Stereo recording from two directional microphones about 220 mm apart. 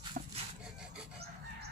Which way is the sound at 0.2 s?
35° right (ahead or behind).